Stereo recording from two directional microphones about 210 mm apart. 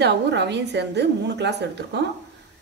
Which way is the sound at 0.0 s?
55° right (ahead or behind).